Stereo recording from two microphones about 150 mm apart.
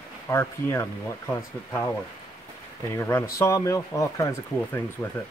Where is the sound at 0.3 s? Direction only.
20° left (ahead or behind).